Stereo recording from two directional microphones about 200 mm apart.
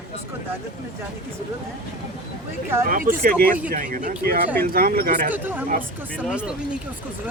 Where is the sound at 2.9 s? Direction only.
45° right (ahead or behind).